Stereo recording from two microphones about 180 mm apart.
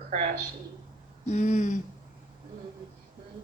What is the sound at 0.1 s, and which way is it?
Speech, 50° right (ahead or behind).